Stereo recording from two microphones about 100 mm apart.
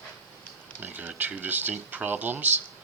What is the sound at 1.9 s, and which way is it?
Speech, 15° right (ahead or behind).